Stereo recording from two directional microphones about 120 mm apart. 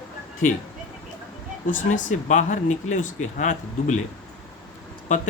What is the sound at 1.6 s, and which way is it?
Speech, 90° left.